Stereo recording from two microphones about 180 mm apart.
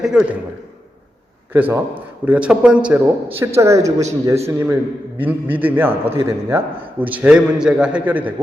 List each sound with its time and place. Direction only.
0.0 s a man's voice: 5° right (ahead or behind)
1.5 s a man's voice: 10° right (ahead or behind)